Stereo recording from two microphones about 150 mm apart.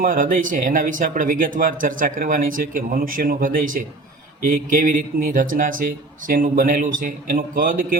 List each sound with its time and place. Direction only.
0.0 s speech: 65° right (ahead or behind)